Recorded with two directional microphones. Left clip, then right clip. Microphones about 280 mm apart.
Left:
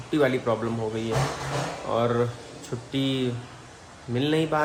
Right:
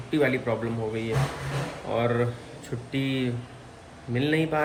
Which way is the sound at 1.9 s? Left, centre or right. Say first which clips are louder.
Left 1 dB; centre.